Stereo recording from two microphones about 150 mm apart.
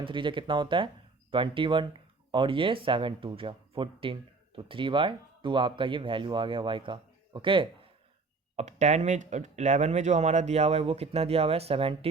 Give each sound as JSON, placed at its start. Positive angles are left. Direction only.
{"t": 0.0, "sound": "speech", "side_deg": -35}
{"t": 8.5, "sound": "speech", "side_deg": -50}